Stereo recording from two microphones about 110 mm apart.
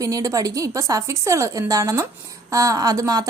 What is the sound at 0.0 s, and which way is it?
A woman's voice, 30° right (ahead or behind).